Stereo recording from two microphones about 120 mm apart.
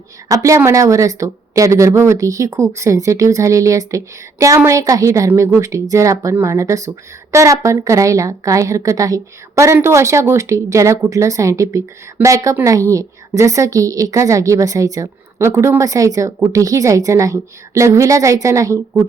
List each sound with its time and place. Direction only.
0.3 s a woman's voice: 25° right (ahead or behind)